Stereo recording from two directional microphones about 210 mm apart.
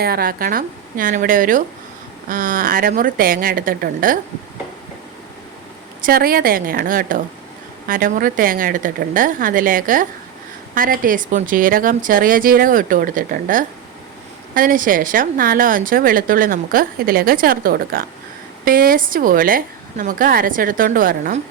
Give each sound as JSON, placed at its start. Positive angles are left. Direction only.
{"t": 0.0, "sound": "a woman's voice", "side_deg": -45}
{"t": 6.0, "sound": "a woman's voice", "side_deg": -45}